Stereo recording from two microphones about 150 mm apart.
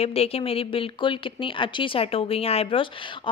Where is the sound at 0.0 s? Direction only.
40° left (ahead or behind).